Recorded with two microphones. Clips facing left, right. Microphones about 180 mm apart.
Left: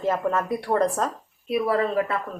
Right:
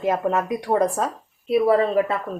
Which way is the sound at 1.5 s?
25° right (ahead or behind).